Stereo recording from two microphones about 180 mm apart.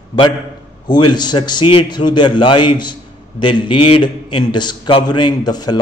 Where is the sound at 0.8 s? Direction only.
25° left (ahead or behind).